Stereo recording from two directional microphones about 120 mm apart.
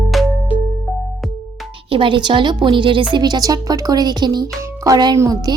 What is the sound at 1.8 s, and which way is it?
A woman's voice, 45° right (ahead or behind).